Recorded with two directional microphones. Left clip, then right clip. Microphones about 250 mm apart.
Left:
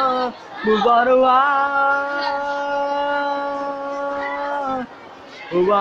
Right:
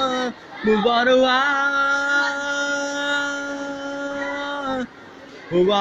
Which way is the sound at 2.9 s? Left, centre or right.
Centre.